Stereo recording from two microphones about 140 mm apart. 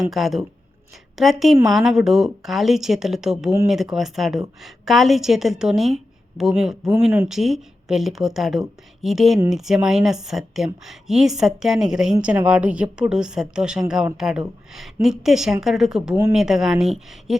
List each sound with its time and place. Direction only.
0.0 s a woman's voice: centre (ahead or behind)
6.9 s speech: 15° right (ahead or behind)
7.3 s a woman's voice: centre (ahead or behind)